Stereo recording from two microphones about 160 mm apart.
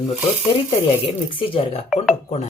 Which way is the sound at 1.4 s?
35° left (ahead or behind).